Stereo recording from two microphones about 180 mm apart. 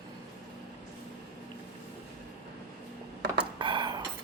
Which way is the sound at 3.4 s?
25° right (ahead or behind).